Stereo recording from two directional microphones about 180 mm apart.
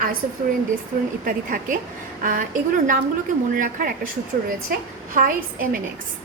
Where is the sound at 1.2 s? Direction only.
45° right (ahead or behind).